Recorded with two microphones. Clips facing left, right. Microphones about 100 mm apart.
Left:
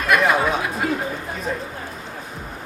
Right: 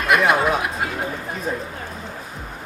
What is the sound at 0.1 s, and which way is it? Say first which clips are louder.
Speech: right 1 dB; 20° right (ahead or behind).